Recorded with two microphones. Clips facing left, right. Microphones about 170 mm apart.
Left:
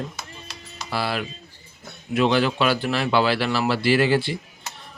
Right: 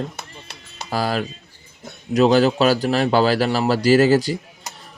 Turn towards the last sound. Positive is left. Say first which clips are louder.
# right 5 dB
turn(degrees=-40)  # may be behind; listen again after turning